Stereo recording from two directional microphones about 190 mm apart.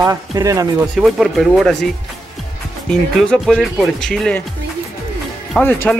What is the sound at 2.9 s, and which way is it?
Speech, centre (ahead or behind).